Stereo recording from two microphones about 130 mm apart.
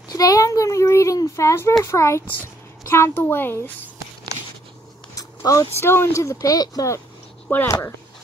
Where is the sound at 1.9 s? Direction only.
20° left (ahead or behind).